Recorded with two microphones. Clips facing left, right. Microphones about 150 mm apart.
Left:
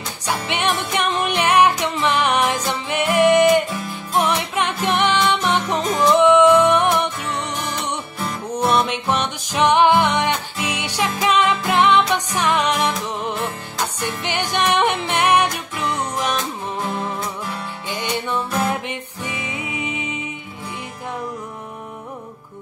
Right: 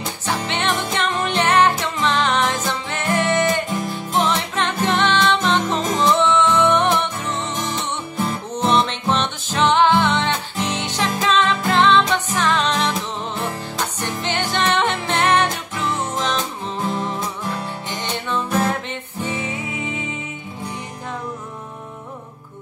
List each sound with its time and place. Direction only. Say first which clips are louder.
0.3 s music: left 1 dB; 15° left (ahead or behind)
18.0 s music: left 1 dB; 10° left (ahead or behind)